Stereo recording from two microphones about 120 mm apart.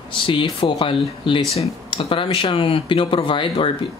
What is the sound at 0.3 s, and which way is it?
Speech, 45° left (ahead or behind).